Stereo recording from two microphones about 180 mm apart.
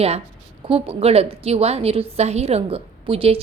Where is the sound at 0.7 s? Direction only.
30° right (ahead or behind).